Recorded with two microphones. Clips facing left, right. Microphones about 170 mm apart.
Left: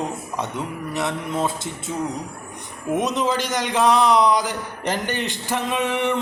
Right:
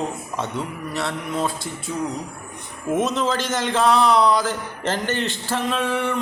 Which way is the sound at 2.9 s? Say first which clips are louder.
Even; 15° left (ahead or behind).